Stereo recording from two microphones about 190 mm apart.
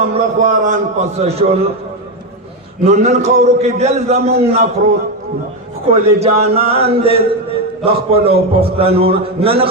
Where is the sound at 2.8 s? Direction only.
35° right (ahead or behind).